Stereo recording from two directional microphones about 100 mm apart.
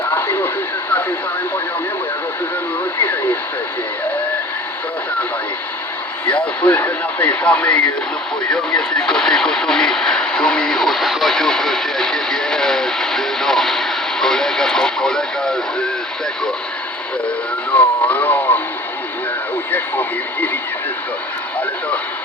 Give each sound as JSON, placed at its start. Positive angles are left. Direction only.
{"t": 0.0, "sound": "radio", "side_deg": 20}
{"t": 6.2, "sound": "speech", "side_deg": 15}
{"t": 17.7, "sound": "speech", "side_deg": 15}
{"t": 19.7, "sound": "speech", "side_deg": 20}